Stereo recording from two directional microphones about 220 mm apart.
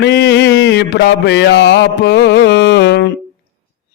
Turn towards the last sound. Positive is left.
turn(degrees=50)  # may be behind; listen again after turning